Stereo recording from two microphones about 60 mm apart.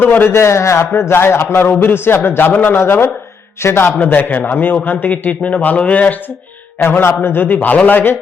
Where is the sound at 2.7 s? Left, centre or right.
Left.